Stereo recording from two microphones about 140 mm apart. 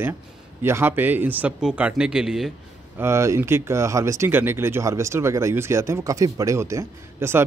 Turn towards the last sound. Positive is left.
turn(degrees=-15)  # may be behind; listen again after turning